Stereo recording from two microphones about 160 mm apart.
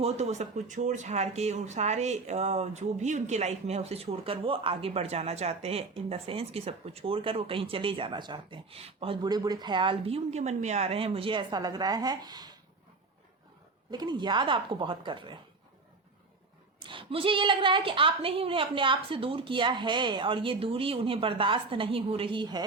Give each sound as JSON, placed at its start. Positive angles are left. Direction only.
{"t": 0.0, "sound": "speech", "side_deg": -45}
{"t": 13.9, "sound": "speech", "side_deg": -25}
{"t": 16.8, "sound": "speech", "side_deg": -30}